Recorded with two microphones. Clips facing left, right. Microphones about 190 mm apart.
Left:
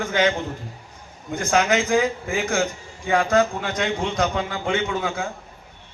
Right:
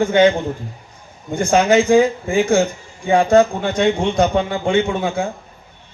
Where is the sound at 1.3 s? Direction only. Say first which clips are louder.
Right 6 dB; 30° right (ahead or behind).